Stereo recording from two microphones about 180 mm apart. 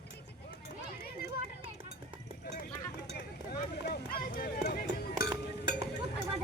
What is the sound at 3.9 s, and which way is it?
Run, 55° left (ahead or behind).